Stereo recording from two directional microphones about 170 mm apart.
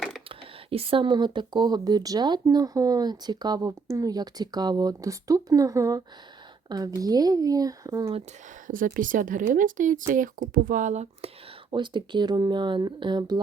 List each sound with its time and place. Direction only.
0.3 s speech: 35° right (ahead or behind)
8.6 s speech: 50° right (ahead or behind)
11.7 s speech: 25° right (ahead or behind)